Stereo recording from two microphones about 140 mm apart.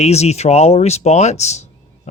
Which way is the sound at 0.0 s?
50° left (ahead or behind).